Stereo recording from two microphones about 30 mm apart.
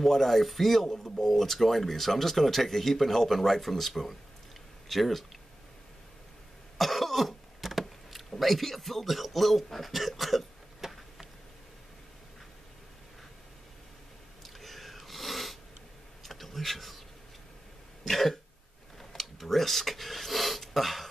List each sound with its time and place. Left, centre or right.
0.0 s speech: centre
0.8 s speech: centre
1.2 s speech: centre
6.8 s cough: centre
8.4 s speech: centre
10.8 s a sound: centre
14.4 s a sound: centre
18.0 s throat clearing: centre
18.9 s a sound: centre